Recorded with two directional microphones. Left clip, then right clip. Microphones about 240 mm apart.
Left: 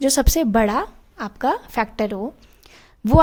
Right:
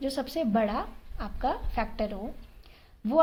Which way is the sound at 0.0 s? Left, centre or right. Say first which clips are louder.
Left 11 dB; left.